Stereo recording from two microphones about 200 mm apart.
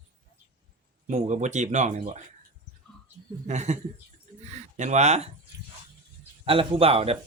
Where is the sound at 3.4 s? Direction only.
35° right (ahead or behind).